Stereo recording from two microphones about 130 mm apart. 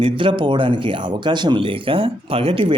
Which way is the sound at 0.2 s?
40° right (ahead or behind).